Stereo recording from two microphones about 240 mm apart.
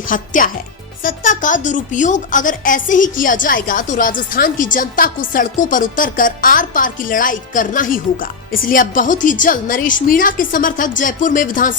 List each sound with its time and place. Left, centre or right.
0.0 s speech: left